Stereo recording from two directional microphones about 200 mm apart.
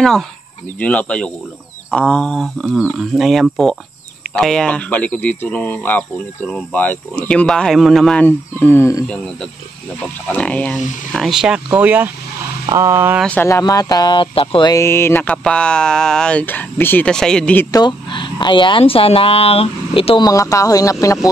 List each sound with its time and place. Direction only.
0.7 s speech: 5° left (ahead or behind)
10.3 s speech: 5° left (ahead or behind); by 13.2 s 10° right (ahead or behind)
13.2 s speech: 10° left (ahead or behind)
17.6 s speech: 20° left (ahead or behind)